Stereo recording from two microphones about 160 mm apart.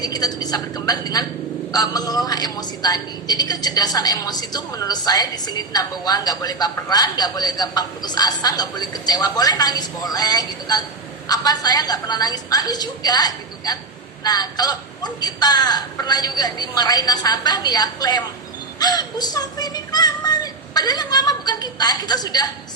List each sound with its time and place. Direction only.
0.0 s a woman's voice: 25° left (ahead or behind)